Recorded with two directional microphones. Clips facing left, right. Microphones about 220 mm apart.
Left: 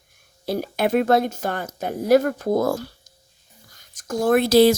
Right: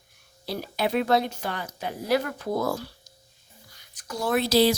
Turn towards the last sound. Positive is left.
turn(degrees=50)  # may be behind; listen again after turning